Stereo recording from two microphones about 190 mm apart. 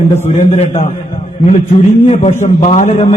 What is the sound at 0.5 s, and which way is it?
Speech, 35° left (ahead or behind).